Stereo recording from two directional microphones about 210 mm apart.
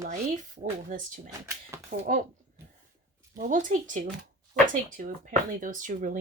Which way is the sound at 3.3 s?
40° right (ahead or behind).